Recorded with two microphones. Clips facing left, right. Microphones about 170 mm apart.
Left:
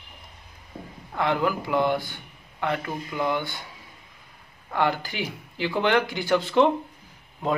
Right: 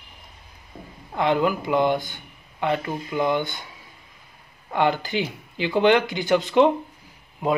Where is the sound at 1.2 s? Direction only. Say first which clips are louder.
Right 3 dB; 20° right (ahead or behind).